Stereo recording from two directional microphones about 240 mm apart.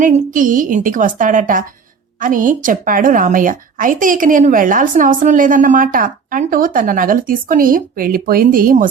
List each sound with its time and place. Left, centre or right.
0.0 s a woman's voice: right